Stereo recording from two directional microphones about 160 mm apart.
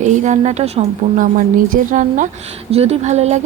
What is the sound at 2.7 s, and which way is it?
Speech, 40° right (ahead or behind).